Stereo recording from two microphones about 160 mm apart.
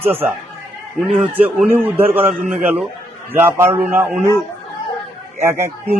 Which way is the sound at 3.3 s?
15° right (ahead or behind).